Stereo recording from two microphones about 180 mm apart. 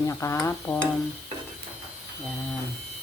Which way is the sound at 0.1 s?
15° left (ahead or behind).